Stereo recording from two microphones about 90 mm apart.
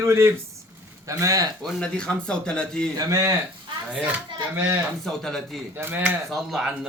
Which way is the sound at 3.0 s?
40° right (ahead or behind).